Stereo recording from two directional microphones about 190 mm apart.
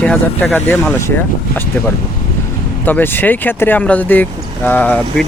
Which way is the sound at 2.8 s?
10° left (ahead or behind).